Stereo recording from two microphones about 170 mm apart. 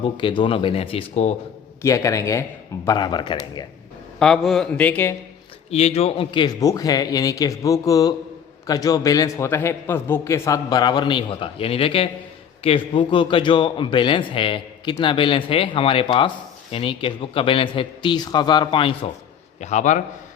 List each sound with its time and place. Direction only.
0.0 s a man's voice: 30° left (ahead or behind)
1.8 s a man's voice: 20° left (ahead or behind)
4.2 s a man's voice: 5° left (ahead or behind)
5.7 s a man's voice: 40° left (ahead or behind)
19.6 s a man's voice: 45° left (ahead or behind)